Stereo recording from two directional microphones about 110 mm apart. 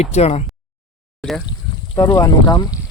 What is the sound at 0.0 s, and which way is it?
Speech, 80° left.